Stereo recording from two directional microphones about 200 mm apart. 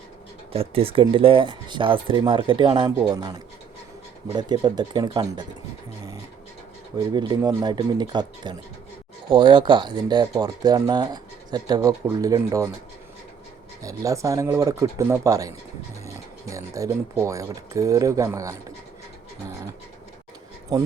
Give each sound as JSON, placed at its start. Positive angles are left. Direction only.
{"t": 0.5, "sound": "speech", "side_deg": -30}
{"t": 7.1, "sound": "speech", "side_deg": -20}
{"t": 13.8, "sound": "speech", "side_deg": -15}
{"t": 20.7, "sound": "speech", "side_deg": -20}